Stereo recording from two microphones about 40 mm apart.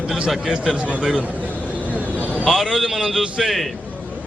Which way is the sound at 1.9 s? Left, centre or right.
Right.